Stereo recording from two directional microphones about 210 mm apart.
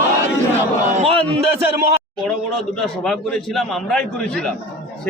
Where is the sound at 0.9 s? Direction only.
30° right (ahead or behind).